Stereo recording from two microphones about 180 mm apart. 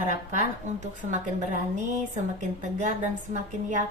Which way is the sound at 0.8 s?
45° right (ahead or behind).